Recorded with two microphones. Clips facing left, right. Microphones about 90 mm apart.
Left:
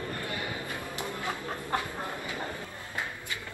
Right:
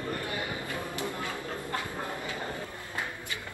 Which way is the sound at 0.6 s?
20° left (ahead or behind).